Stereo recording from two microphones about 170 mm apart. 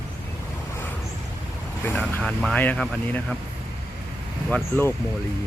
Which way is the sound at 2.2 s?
5° left (ahead or behind).